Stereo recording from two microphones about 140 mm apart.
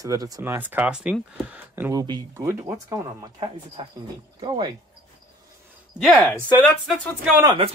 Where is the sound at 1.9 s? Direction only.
25° right (ahead or behind).